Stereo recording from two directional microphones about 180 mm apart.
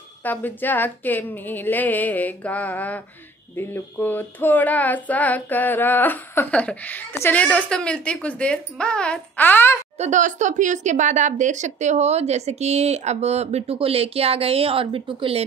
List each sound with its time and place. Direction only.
0.2 s child singing: 10° left (ahead or behind)
9.9 s speech: 40° right (ahead or behind)